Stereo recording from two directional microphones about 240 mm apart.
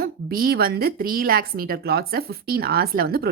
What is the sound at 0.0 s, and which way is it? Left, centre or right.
A woman's voice, right.